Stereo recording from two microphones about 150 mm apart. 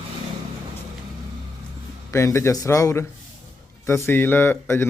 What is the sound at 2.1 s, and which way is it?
A man's voice, 20° left (ahead or behind).